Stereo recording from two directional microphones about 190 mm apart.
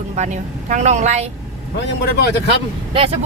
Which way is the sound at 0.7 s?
40° right (ahead or behind).